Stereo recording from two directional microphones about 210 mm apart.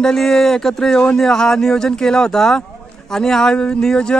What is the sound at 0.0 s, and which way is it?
Speech, centre (ahead or behind).